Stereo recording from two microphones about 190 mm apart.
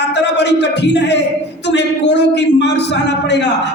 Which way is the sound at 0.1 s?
65° left (ahead or behind).